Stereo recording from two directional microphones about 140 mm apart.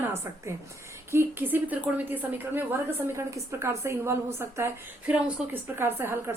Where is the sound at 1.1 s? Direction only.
15° right (ahead or behind).